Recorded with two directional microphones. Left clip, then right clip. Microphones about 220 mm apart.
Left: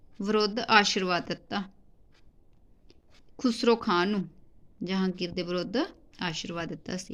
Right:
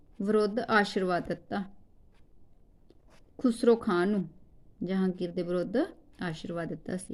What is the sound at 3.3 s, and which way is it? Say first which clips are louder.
A woman's voice: even; 5° right (ahead or behind).